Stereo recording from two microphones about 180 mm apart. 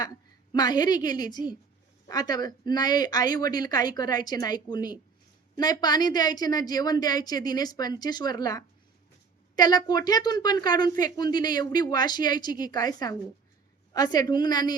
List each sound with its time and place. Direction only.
0.5 s a woman's voice: 20° left (ahead or behind)